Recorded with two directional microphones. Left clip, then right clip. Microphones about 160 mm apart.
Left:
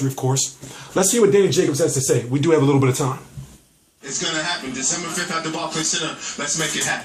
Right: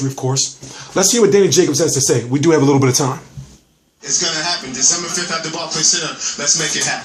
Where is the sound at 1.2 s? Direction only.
35° right (ahead or behind).